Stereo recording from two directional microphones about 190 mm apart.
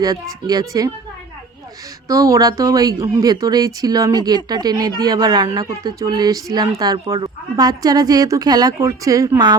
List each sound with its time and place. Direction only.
0.0 s a woman's voice: 20° right (ahead or behind)
2.0 s a woman's voice: 15° right (ahead or behind)